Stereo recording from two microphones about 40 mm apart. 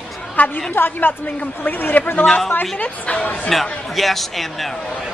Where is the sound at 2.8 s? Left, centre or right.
Left.